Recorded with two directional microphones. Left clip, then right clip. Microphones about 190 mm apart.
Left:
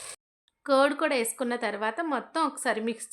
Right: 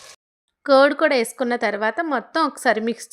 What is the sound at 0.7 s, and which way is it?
A woman's voice, 30° right (ahead or behind).